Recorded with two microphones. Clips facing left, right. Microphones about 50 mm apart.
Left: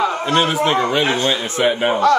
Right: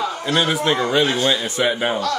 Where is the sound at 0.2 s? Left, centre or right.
Left.